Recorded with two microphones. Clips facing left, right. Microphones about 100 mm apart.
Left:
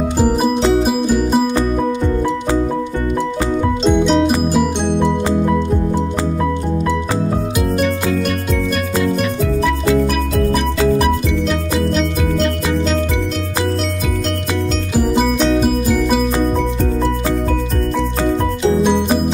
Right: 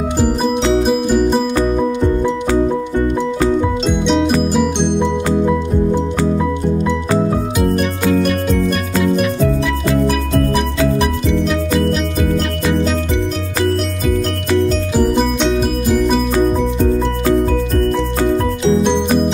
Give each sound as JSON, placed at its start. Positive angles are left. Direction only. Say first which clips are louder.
{"t": 0.2, "sound": "music", "louder": "left 1 dB", "side_deg": 5}
{"t": 3.8, "sound": "music", "louder": "left 2 dB", "side_deg": 0}
{"t": 9.0, "sound": "music", "louder": "right 4 dB", "side_deg": -5}